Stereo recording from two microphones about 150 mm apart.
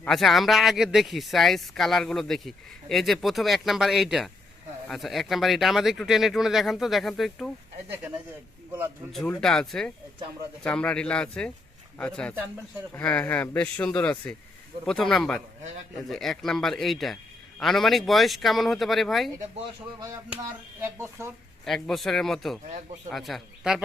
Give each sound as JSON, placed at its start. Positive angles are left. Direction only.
{"t": 0.0, "sound": "speech", "side_deg": 0}
{"t": 7.9, "sound": "speech", "side_deg": -10}
{"t": 9.1, "sound": "speech", "side_deg": 5}
{"t": 20.8, "sound": "speech", "side_deg": -20}
{"t": 21.6, "sound": "speech", "side_deg": 5}